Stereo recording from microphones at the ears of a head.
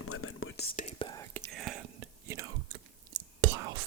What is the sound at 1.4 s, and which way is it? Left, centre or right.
Whispering, right.